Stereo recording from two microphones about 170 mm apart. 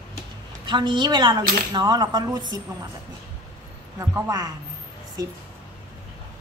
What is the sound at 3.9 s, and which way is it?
A woman's voice, 15° right (ahead or behind).